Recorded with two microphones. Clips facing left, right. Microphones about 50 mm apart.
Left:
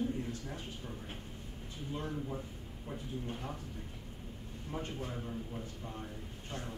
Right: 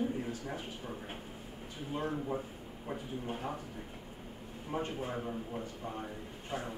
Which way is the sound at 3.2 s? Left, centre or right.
Centre.